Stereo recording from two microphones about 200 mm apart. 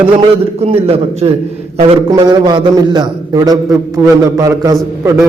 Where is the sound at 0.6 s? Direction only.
30° right (ahead or behind).